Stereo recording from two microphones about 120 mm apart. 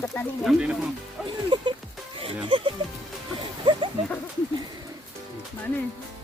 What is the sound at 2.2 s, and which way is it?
Speech, 50° right (ahead or behind).